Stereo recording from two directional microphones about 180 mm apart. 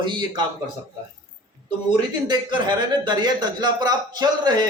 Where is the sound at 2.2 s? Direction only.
25° right (ahead or behind).